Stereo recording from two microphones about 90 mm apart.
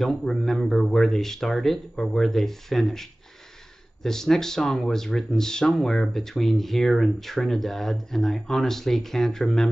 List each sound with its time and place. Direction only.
0.0 s speech: centre (ahead or behind)